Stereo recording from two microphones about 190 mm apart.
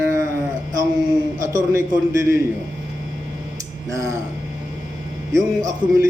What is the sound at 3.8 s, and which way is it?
Speech, 15° right (ahead or behind).